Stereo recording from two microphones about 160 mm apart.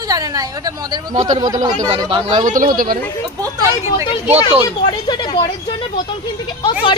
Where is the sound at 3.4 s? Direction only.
20° right (ahead or behind).